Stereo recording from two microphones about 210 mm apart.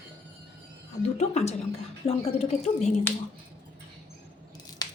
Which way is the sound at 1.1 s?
30° left (ahead or behind).